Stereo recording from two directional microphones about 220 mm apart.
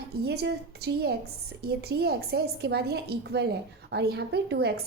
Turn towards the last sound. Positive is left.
turn(degrees=-45)  # may be behind; listen again after turning